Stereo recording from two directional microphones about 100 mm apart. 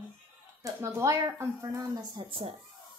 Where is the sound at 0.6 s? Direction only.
30° right (ahead or behind).